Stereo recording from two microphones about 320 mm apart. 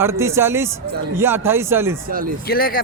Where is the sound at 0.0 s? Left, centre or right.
Centre.